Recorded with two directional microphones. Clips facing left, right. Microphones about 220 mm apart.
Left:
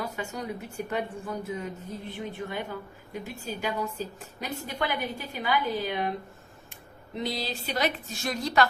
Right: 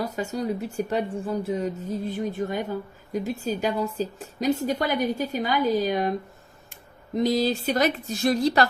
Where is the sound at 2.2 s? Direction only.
40° right (ahead or behind).